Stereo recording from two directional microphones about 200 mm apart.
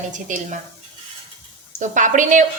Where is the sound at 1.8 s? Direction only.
40° right (ahead or behind).